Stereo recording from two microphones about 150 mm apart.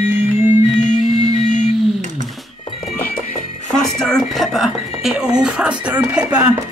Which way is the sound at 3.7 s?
5° left (ahead or behind).